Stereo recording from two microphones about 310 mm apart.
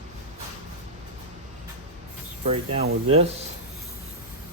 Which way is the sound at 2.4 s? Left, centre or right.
Centre.